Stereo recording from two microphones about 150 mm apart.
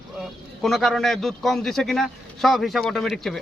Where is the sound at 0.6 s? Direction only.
Centre (ahead or behind).